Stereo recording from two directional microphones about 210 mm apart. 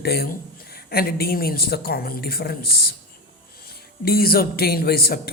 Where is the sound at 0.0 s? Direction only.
50° left (ahead or behind).